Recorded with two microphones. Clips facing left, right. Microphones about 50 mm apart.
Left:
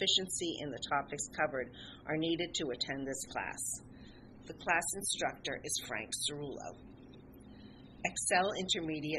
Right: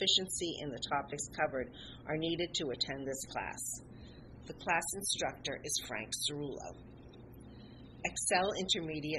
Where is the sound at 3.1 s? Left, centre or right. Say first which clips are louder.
Even; centre.